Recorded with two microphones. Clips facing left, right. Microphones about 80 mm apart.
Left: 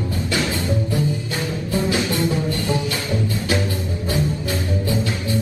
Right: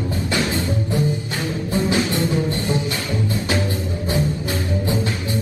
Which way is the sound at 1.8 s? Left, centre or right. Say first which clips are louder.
Right 1 dB; right.